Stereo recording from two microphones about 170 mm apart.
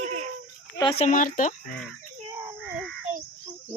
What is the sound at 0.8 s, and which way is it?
Speech, 30° left (ahead or behind).